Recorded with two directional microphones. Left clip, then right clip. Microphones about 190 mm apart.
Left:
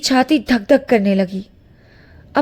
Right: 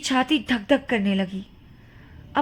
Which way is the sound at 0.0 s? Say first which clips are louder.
Left 7 dB; 30° left (ahead or behind).